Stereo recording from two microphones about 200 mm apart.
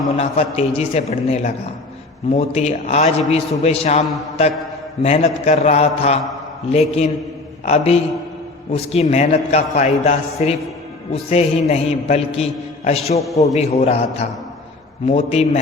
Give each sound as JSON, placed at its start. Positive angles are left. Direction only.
{"t": 0.2, "sound": "a man's voice", "side_deg": 30}